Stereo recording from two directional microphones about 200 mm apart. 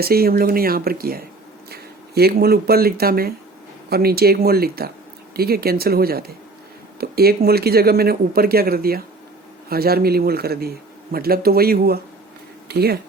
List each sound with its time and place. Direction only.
0.0 s a man's voice: 50° right (ahead or behind)